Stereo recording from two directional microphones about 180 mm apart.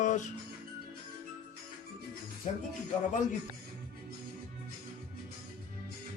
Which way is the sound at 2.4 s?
40° left (ahead or behind).